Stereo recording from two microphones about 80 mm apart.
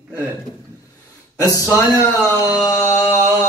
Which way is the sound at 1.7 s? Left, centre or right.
Left.